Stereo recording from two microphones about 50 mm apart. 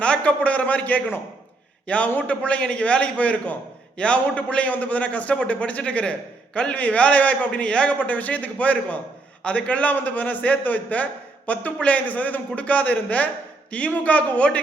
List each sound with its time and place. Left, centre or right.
0.0 s a man's voice: left
2.1 s a man's voice: left